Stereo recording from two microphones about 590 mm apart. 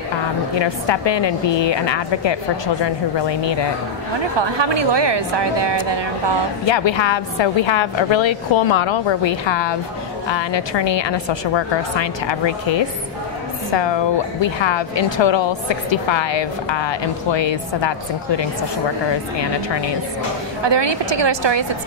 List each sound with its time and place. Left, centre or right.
0.6 s speech: left
4.4 s a woman's voice: right
6.6 s speech: left
20.6 s a woman's voice: right